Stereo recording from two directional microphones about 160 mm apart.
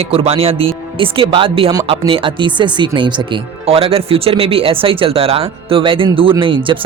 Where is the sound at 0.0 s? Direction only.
35° right (ahead or behind).